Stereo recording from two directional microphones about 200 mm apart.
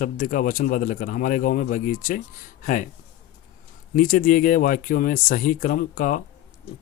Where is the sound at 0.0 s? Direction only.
45° left (ahead or behind).